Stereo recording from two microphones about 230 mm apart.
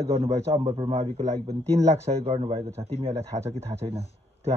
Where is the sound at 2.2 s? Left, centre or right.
Right.